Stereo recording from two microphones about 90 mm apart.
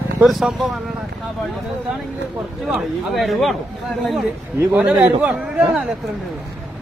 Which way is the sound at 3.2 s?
Centre (ahead or behind).